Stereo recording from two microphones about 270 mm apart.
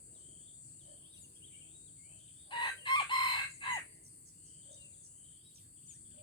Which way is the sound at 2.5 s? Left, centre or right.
Centre.